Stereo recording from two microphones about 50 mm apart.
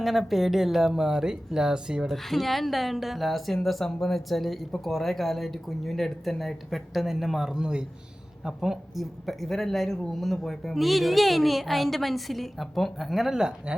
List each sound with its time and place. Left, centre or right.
0.0 s a child's voice: centre
2.0 s a child's voice: centre
13.7 s speech: centre